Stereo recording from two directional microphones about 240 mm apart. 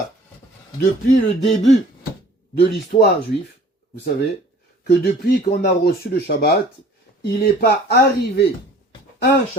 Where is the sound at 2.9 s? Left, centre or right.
Left.